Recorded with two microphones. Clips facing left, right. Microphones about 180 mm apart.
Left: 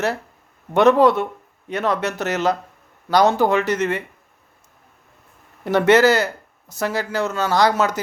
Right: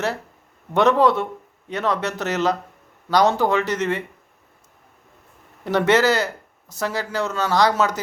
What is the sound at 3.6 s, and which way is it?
Speech, 50° left (ahead or behind).